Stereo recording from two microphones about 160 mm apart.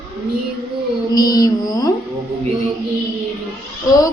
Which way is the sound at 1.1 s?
25° left (ahead or behind).